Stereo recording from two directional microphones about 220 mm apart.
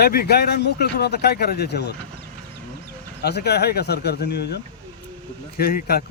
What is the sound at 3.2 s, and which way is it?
Speech, 45° left (ahead or behind).